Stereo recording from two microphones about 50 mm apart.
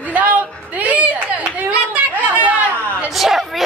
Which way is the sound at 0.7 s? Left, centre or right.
Right.